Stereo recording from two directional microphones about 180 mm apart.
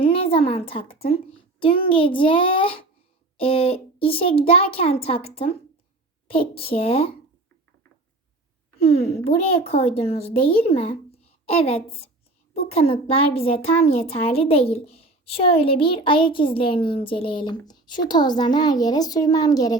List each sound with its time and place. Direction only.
0.0 s a woman's voice: 30° left (ahead or behind)
9.0 s a child's voice: 35° left (ahead or behind)